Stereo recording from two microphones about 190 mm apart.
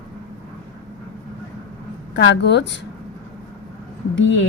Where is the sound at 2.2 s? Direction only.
70° left (ahead or behind).